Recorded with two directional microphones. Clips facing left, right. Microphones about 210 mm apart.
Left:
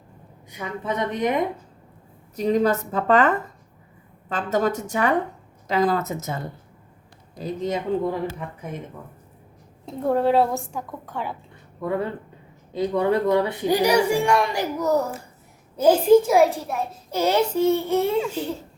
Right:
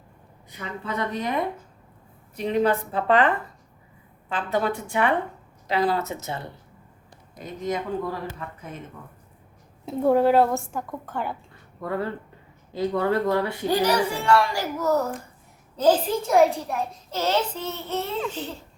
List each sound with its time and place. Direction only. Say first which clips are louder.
0.5 s speech: left 3 dB; 20° left (ahead or behind)
2.3 s a woman's voice: left 2 dB; 40° left (ahead or behind)
7.4 s speech: left 3 dB; 30° left (ahead or behind)
9.8 s speech: right 2 dB; 5° right (ahead or behind)
11.8 s speech: left 3 dB; 20° left (ahead or behind); by 17.0 s centre (ahead or behind)
17.1 s speech: left 5 dB; 10° left (ahead or behind)